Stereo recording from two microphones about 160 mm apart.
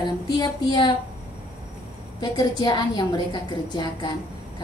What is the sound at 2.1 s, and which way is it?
A woman's voice, 25° left (ahead or behind).